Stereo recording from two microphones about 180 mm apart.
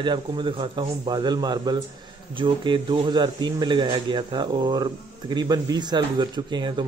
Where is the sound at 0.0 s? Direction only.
25° right (ahead or behind).